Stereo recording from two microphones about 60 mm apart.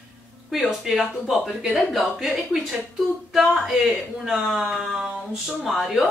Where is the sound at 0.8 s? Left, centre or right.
Centre.